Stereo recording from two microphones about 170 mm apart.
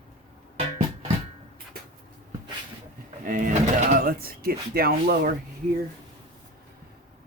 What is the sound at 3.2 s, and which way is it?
Speech, 50° right (ahead or behind).